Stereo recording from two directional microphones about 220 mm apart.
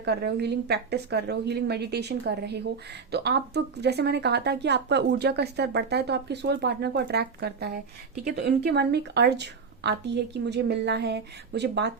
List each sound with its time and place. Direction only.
0.0 s speech: 50° right (ahead or behind)